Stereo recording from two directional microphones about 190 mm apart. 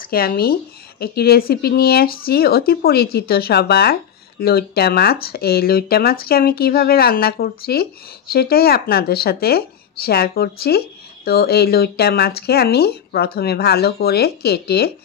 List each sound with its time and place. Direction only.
0.0 s speech: 50° left (ahead or behind)